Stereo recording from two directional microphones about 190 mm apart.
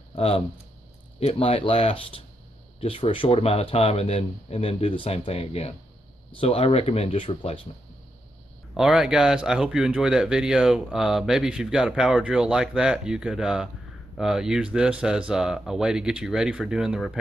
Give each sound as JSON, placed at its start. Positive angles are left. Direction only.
{"t": 0.1, "sound": "speech", "side_deg": 30}
{"t": 8.7, "sound": "speech", "side_deg": -5}